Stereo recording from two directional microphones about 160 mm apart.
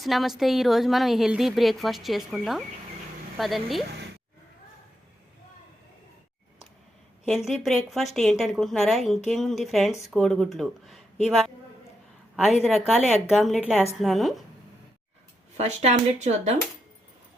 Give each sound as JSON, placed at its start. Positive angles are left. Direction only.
{"t": 0.0, "sound": "a woman's voice", "side_deg": 0}
{"t": 7.3, "sound": "a woman's voice", "side_deg": 0}
{"t": 12.6, "sound": "a woman's voice", "side_deg": -5}
{"t": 15.5, "sound": "speech", "side_deg": -45}